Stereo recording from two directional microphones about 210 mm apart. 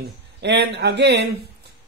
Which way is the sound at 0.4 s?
55° right (ahead or behind).